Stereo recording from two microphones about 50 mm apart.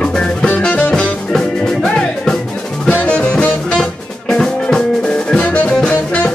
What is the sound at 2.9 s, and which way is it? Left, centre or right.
Music, left.